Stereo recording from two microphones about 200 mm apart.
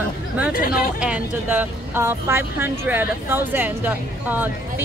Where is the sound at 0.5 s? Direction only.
45° left (ahead or behind).